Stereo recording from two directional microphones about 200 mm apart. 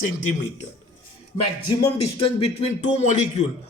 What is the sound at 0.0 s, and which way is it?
Speech, 40° left (ahead or behind).